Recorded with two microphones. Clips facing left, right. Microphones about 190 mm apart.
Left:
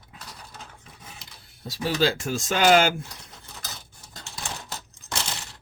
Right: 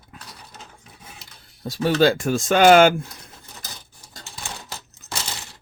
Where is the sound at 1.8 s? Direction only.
60° right (ahead or behind).